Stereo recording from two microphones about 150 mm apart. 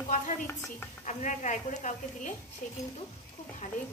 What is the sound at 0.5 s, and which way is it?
Speech, 15° left (ahead or behind).